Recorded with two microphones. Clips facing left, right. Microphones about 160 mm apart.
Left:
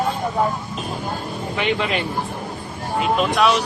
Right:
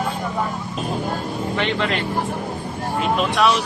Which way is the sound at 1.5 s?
10° left (ahead or behind).